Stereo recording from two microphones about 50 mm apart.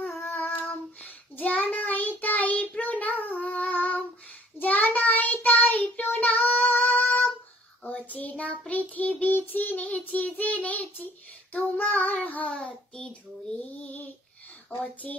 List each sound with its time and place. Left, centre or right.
0.0 s child singing: left; by 13.7 s centre
13.7 s child singing: left
14.8 s a sound: left